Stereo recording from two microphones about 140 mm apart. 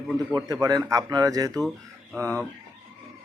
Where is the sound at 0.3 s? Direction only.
25° right (ahead or behind).